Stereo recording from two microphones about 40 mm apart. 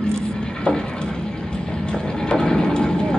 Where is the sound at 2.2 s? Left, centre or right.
Centre.